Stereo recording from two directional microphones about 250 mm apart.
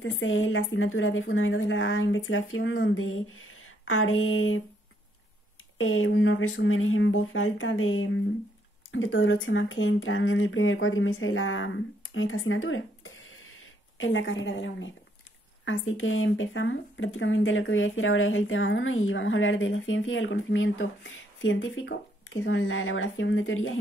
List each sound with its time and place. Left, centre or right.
0.0 s speech: left
5.8 s speech: left